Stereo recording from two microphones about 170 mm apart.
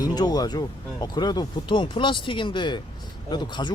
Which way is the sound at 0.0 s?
25° left (ahead or behind).